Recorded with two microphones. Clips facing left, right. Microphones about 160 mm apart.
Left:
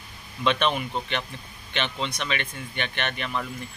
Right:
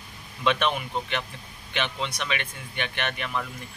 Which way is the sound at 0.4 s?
5° right (ahead or behind).